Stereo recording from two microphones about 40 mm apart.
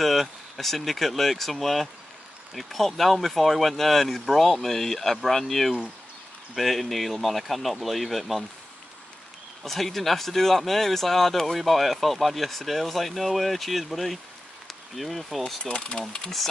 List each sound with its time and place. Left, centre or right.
0.0 s speech: centre
9.6 s speech: centre
15.6 s speech: left